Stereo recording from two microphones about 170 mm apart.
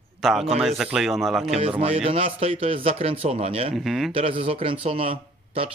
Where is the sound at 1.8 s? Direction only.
35° right (ahead or behind).